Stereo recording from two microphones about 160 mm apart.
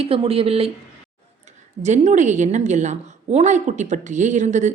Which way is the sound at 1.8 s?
50° right (ahead or behind).